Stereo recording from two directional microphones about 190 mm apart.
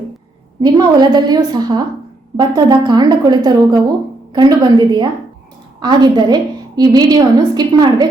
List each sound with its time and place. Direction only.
0.6 s a woman's voice: 20° right (ahead or behind)